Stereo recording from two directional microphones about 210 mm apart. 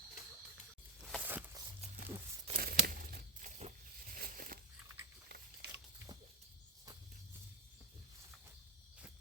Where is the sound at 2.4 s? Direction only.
40° right (ahead or behind).